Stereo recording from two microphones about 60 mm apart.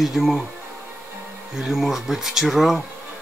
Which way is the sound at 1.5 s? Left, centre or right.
Centre.